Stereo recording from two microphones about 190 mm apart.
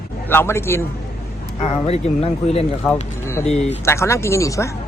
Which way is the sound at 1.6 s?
30° left (ahead or behind).